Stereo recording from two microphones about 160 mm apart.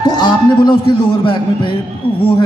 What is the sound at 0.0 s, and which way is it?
A man's voice, 25° left (ahead or behind).